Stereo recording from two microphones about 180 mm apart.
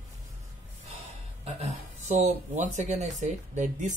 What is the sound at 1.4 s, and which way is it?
Speech, 35° right (ahead or behind).